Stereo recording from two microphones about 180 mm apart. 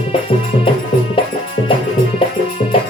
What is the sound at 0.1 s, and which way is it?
Music, 30° left (ahead or behind).